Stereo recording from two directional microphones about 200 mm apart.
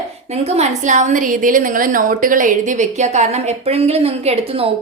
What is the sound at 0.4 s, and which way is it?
A woman's voice, 35° right (ahead or behind).